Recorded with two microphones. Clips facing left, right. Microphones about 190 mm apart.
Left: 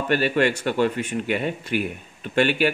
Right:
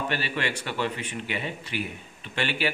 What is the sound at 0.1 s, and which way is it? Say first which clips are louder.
Speech: left 9 dB; 50° left (ahead or behind).